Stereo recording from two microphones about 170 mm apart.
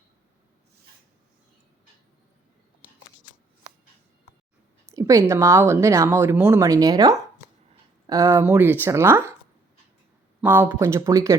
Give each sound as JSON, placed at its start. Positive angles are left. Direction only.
{"t": 4.9, "sound": "a woman's voice", "side_deg": -20}
{"t": 10.4, "sound": "a woman's voice", "side_deg": -15}